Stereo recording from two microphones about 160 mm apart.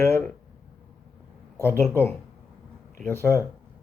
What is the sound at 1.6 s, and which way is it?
Speech, 15° left (ahead or behind).